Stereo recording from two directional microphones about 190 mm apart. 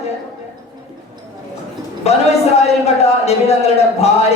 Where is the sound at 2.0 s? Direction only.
35° left (ahead or behind).